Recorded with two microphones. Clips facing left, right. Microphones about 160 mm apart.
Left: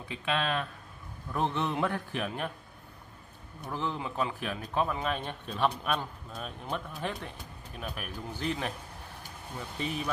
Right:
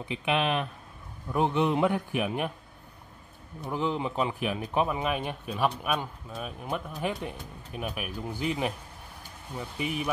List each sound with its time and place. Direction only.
0.1 s speech: 20° right (ahead or behind)
3.6 s speech: 15° right (ahead or behind)
9.8 s speech: 15° right (ahead or behind)